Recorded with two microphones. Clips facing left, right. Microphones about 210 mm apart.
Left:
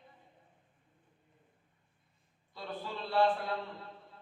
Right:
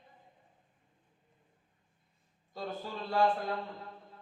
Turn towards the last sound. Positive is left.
turn(degrees=-45)  # may be behind; listen again after turning